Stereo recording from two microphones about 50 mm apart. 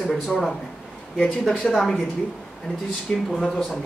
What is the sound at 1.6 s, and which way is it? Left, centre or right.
Speech, centre.